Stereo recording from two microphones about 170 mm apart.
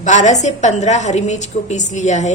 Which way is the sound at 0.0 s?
45° left (ahead or behind).